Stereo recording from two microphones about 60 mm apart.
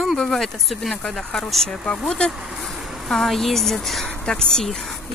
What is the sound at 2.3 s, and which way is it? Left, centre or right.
Speech, centre.